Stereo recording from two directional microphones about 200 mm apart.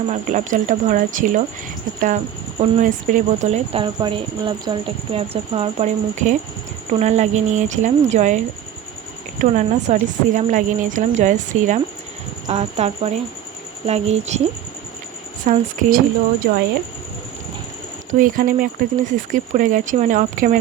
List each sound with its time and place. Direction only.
0.1 s speech: 40° right (ahead or behind)
9.4 s speech: 35° right (ahead or behind)
15.5 s speech: 40° right (ahead or behind)
16.4 s speech: 55° right (ahead or behind)
18.1 s speech: 40° right (ahead or behind)